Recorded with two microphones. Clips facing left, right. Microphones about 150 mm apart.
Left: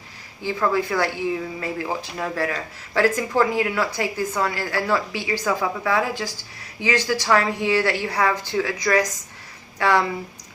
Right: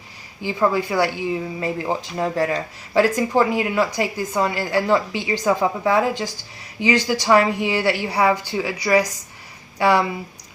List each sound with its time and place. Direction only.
0.4 s a woman's voice: 15° right (ahead or behind)